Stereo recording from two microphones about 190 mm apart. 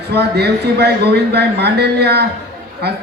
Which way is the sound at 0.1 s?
60° right (ahead or behind).